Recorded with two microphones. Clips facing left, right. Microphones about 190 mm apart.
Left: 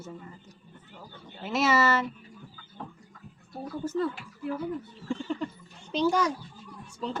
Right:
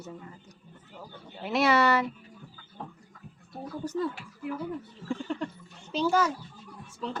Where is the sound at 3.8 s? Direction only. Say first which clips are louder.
Left 2 dB; 15° right (ahead or behind).